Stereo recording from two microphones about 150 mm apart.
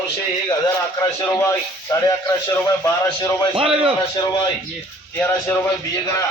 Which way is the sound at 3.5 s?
40° right (ahead or behind).